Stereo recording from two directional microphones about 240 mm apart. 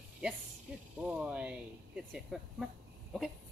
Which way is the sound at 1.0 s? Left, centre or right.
Centre.